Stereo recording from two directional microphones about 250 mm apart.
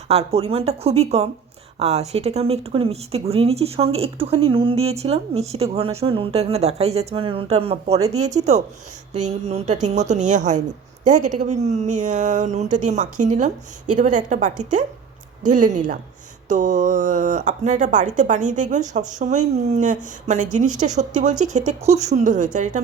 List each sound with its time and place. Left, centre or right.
0.1 s speech: right